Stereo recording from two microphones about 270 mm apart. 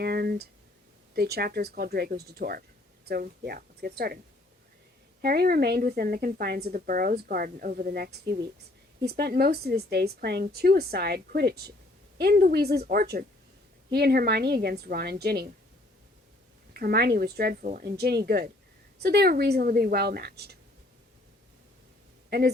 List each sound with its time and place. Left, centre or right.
0.0 s a woman's voice: right
5.2 s a woman's voice: right
16.7 s a woman's voice: right
22.3 s a man's voice: right